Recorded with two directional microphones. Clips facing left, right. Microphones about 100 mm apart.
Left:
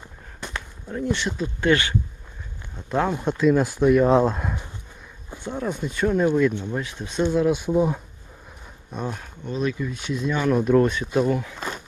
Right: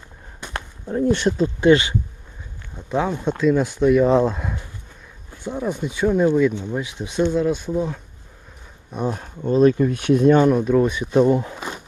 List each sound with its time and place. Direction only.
0.9 s speech: 30° right (ahead or behind)
1.6 s speech: 20° right (ahead or behind)
2.9 s speech: centre (ahead or behind)
7.3 s speech: 5° left (ahead or behind)
8.9 s speech: 5° right (ahead or behind)
9.1 s speech: 35° right (ahead or behind); by 10.4 s 55° right (ahead or behind)
10.5 s speech: centre (ahead or behind)
10.8 s speech: 10° right (ahead or behind)
11.2 s speech: 25° right (ahead or behind)
11.5 s a sound: 10° right (ahead or behind)